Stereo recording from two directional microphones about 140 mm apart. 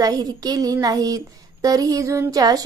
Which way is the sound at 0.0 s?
25° right (ahead or behind).